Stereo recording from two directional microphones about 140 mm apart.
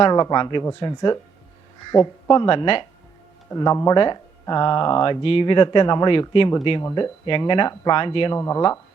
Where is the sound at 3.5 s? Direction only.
25° left (ahead or behind).